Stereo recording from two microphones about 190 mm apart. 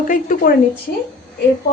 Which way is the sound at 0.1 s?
45° left (ahead or behind).